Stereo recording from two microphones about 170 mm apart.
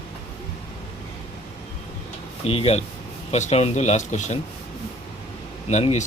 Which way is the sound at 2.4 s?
35° left (ahead or behind).